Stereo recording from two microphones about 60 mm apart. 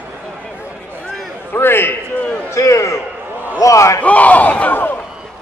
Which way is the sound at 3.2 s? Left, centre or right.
Right.